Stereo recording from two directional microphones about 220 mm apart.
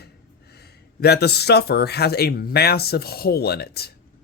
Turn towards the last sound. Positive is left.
turn(degrees=45)  # may be behind; listen again after turning